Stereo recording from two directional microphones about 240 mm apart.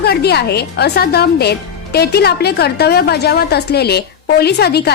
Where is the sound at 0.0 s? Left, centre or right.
Left.